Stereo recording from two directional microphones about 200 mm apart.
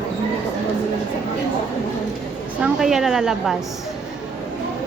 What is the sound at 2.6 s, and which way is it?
Speech, centre (ahead or behind).